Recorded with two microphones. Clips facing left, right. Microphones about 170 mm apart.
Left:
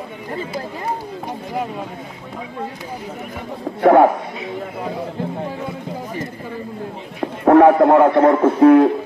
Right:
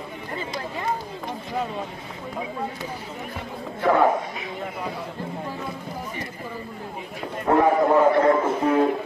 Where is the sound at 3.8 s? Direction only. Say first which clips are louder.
Left 8 dB; 65° left (ahead or behind).